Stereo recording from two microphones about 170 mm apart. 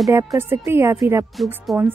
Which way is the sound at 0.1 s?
20° right (ahead or behind).